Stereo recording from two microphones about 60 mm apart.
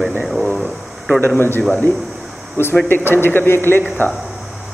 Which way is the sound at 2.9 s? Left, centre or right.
Left.